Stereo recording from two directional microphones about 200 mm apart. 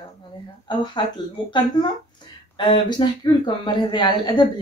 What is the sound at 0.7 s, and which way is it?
Speech, 20° left (ahead or behind).